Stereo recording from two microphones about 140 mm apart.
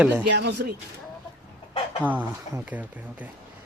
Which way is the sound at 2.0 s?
10° right (ahead or behind).